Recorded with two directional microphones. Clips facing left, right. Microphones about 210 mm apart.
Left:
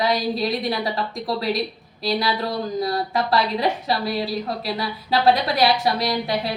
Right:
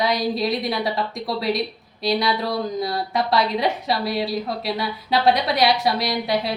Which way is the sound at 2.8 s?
Centre (ahead or behind).